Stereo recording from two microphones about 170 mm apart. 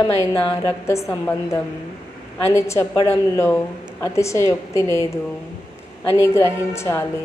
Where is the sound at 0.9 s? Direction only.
15° left (ahead or behind).